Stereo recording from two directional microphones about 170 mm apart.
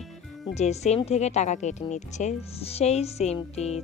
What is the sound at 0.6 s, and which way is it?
Speech, 40° left (ahead or behind).